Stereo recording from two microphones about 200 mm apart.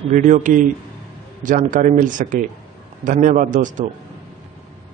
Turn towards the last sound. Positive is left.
turn(degrees=-40)  # may be behind; listen again after turning